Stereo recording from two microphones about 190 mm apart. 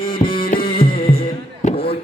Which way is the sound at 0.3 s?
50° left (ahead or behind).